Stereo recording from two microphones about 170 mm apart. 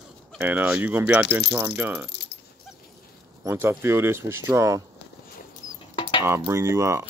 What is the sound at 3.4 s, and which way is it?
Speech, 15° right (ahead or behind).